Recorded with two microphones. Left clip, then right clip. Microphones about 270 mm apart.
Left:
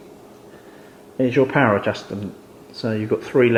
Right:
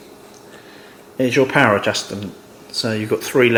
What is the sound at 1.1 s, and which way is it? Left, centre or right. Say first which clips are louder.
Speech: right 2 dB; centre.